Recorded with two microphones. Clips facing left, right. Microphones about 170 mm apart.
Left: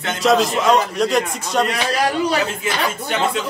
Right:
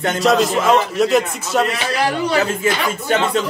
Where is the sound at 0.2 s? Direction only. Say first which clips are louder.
Even; centre (ahead or behind).